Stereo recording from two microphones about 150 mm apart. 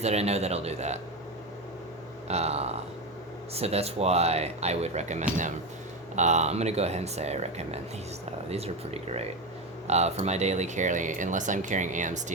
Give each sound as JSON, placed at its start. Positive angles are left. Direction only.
{"t": 0.0, "sound": "speech", "side_deg": -45}
{"t": 2.2, "sound": "speech", "side_deg": -45}